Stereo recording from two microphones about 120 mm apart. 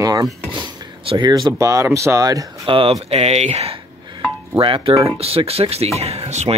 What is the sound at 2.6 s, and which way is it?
Speech, 50° right (ahead or behind).